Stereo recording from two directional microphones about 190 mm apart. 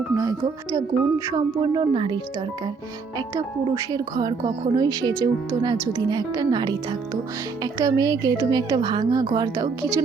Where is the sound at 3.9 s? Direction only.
20° right (ahead or behind).